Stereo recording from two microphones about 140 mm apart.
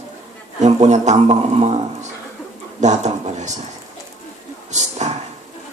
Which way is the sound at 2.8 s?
55° right (ahead or behind).